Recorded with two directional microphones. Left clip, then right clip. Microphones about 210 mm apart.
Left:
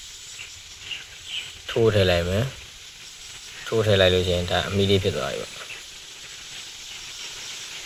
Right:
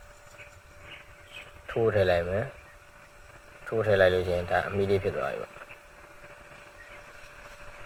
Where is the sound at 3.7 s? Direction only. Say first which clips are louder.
Left 4 dB; 25° left (ahead or behind).